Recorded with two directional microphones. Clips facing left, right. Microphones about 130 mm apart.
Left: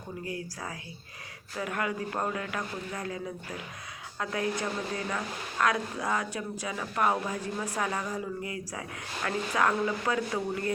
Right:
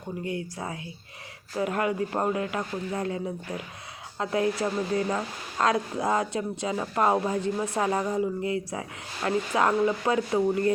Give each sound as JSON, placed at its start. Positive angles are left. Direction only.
{"t": 0.3, "sound": "a woman's voice", "side_deg": -25}